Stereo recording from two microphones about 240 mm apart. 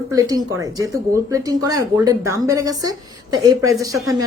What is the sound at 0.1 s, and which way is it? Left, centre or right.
Speech, centre.